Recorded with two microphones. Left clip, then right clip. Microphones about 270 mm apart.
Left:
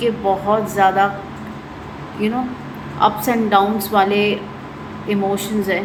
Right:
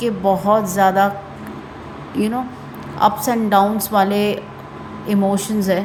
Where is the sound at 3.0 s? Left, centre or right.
Right.